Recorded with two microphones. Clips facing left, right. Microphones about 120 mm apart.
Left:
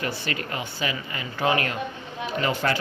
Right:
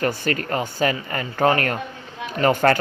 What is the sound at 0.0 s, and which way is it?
Speech, 45° right (ahead or behind).